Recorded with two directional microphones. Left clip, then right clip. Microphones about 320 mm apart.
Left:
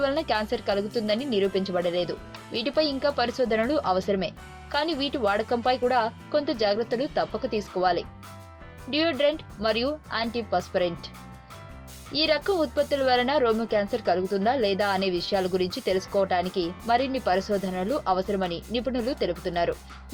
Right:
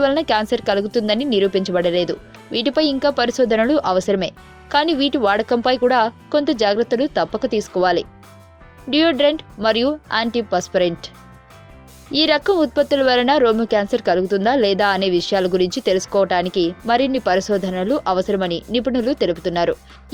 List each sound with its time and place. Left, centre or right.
0.0 s a woman's voice: right
12.1 s a woman's voice: right